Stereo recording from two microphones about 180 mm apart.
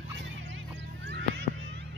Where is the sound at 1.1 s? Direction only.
70° right (ahead or behind).